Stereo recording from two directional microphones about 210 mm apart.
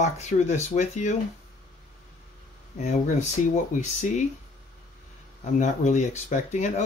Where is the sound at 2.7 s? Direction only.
35° left (ahead or behind).